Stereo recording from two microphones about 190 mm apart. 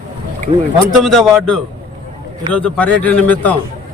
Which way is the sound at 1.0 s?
Centre (ahead or behind).